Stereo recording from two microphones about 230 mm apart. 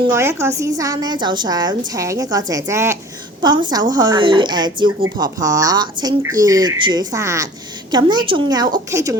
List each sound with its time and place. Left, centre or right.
0.1 s speech: centre